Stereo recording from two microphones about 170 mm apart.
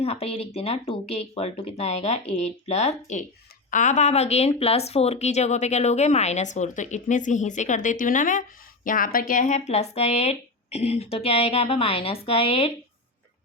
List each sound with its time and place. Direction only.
0.0 s speech: 35° left (ahead or behind)